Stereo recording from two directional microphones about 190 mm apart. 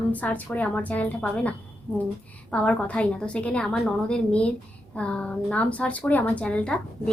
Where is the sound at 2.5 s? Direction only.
5° left (ahead or behind).